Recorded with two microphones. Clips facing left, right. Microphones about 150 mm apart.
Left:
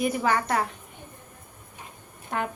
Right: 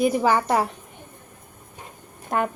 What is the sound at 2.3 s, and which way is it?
Speech, 45° right (ahead or behind).